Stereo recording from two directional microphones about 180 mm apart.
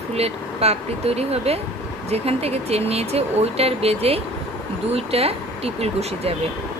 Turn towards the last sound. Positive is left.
turn(degrees=-35)  # may be behind; listen again after turning